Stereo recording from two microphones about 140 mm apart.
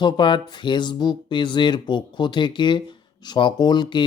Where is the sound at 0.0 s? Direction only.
35° left (ahead or behind).